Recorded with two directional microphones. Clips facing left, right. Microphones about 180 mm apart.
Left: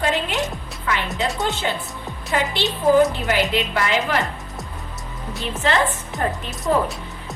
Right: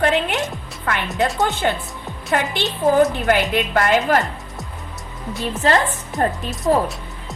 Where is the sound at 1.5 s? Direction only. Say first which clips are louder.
Right 3 dB; 55° right (ahead or behind).